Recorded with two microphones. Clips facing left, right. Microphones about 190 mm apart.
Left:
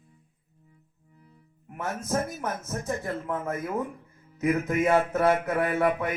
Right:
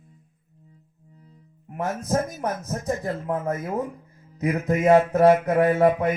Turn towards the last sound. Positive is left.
turn(degrees=-35)  # may be behind; listen again after turning